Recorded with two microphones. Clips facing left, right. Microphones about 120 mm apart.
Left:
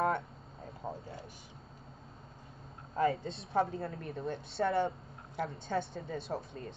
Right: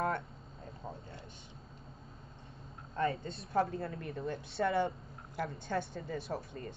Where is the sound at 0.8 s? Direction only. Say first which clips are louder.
Left 5 dB; 30° left (ahead or behind).